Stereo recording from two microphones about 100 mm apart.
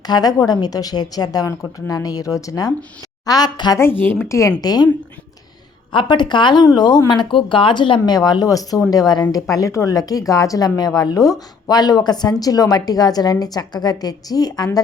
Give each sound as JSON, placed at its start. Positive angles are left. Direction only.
{"t": 0.0, "sound": "speech", "side_deg": 40}
{"t": 3.8, "sound": "speech", "side_deg": 20}
{"t": 4.6, "sound": "speech", "side_deg": 40}
{"t": 5.9, "sound": "speech", "side_deg": 50}